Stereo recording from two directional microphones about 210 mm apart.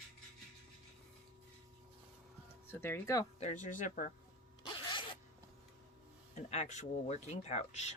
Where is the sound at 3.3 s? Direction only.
35° left (ahead or behind).